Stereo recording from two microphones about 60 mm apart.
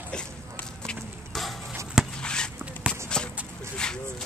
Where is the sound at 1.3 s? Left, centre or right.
Centre.